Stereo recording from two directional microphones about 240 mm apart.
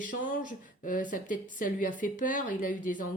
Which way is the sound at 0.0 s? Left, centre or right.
Left.